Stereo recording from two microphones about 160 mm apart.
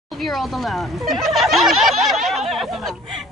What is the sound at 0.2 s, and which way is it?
Speech, centre (ahead or behind).